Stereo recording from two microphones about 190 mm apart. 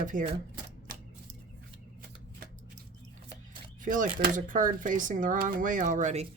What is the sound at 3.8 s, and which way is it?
A woman's voice, 45° right (ahead or behind).